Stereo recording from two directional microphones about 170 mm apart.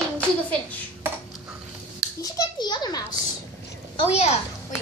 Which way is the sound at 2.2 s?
25° left (ahead or behind).